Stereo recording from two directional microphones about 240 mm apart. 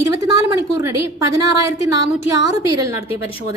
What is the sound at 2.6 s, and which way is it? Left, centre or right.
Speech, centre.